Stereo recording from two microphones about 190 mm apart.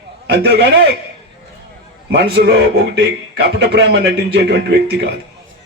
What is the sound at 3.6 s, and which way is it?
A man's voice, 60° right (ahead or behind).